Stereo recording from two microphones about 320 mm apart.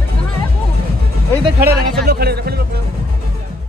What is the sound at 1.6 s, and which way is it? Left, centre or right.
Speech, right.